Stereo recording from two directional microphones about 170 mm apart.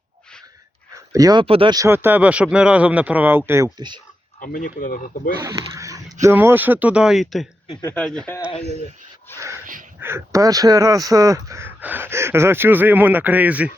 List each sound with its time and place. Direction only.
0.9 s speech: 20° right (ahead or behind)
4.4 s speech: 55° left (ahead or behind)
5.4 s speech: 20° right (ahead or behind); by 7.4 s centre (ahead or behind)
7.7 s speech: 15° left (ahead or behind)
10.0 s speech: 15° right (ahead or behind)